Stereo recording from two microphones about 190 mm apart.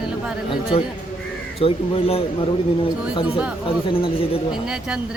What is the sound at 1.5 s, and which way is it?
Speech, 30° left (ahead or behind).